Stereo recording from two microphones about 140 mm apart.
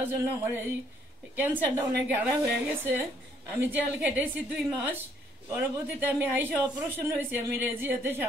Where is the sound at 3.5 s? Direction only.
15° right (ahead or behind).